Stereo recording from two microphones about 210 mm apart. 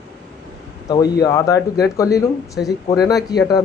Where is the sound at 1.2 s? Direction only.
15° left (ahead or behind).